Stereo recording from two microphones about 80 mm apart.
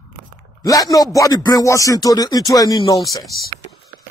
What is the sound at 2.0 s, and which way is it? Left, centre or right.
Speech, left.